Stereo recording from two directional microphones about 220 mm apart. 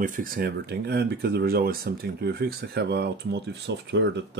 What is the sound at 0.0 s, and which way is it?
Speech, 40° right (ahead or behind).